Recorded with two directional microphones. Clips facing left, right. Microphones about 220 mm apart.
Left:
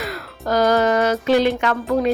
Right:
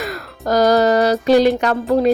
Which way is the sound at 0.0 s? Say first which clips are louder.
Right 3 dB; 45° right (ahead or behind).